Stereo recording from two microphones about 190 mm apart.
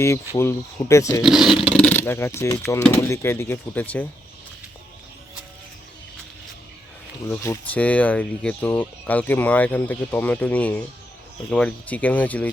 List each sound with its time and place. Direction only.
0.3 s speech: 15° left (ahead or behind)
1.2 s speech: centre (ahead or behind)
1.7 s speech: 10° left (ahead or behind)
7.3 s speech: 15° left (ahead or behind)